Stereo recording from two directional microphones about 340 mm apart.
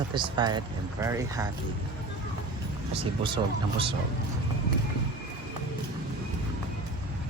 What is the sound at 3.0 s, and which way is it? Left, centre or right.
Speech, centre.